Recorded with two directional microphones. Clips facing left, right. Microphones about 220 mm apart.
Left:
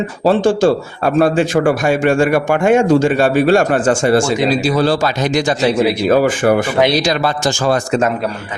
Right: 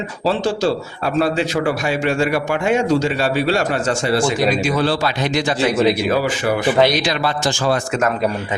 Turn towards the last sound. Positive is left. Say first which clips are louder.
# left 4 dB
turn(degrees=45)  # may be behind; listen again after turning